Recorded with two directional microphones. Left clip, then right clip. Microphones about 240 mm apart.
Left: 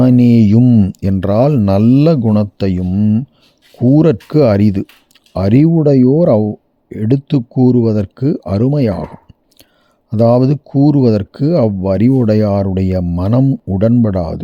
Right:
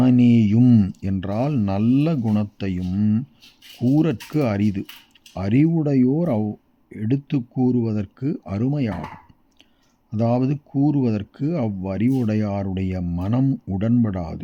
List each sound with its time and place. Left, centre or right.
0.0 s speech: left
10.1 s speech: left